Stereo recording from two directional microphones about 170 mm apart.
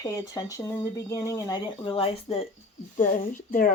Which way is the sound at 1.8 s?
30° left (ahead or behind).